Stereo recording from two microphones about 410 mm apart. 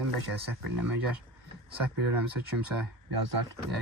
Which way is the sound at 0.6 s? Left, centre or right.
Right.